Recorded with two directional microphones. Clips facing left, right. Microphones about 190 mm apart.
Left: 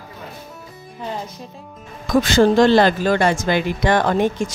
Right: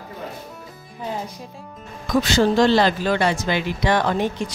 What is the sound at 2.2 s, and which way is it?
Speech, 50° left (ahead or behind).